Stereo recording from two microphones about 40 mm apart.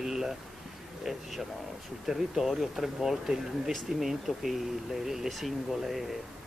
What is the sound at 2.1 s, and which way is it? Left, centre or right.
Speech, centre.